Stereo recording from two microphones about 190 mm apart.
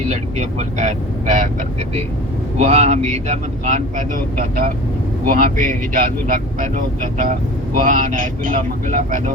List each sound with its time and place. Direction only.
0.0 s speech: 35° right (ahead or behind)
2.6 s speech: 35° right (ahead or behind)